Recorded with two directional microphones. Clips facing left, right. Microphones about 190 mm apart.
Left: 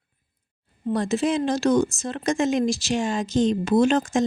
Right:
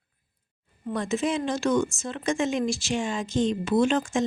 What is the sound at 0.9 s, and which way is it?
Speech, 35° left (ahead or behind).